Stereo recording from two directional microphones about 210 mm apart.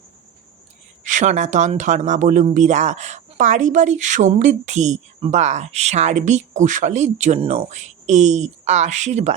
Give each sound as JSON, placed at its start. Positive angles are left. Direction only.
{"t": 1.0, "sound": "speech", "side_deg": -35}